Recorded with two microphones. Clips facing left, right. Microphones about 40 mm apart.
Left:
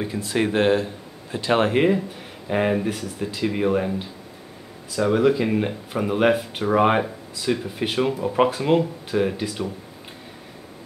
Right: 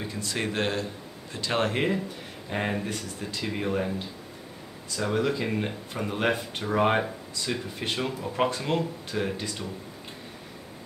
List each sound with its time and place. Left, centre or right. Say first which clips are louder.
0.0 s speech: left 8 dB; centre